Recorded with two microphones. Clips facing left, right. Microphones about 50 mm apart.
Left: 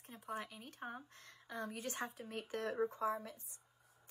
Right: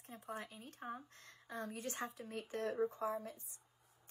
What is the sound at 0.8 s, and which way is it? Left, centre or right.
A woman's voice, left.